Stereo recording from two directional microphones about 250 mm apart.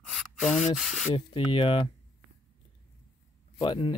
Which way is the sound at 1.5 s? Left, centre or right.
Left.